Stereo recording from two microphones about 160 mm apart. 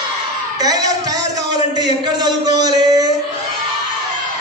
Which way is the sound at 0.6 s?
25° right (ahead or behind).